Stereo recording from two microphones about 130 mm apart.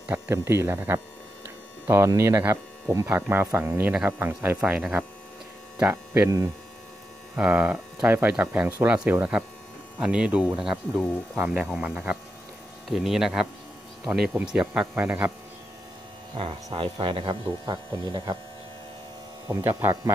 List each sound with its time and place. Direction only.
0.1 s speech: 20° right (ahead or behind)
7.3 s speech: 15° right (ahead or behind)
16.7 s speech: 45° right (ahead or behind)
19.4 s speech: 25° right (ahead or behind)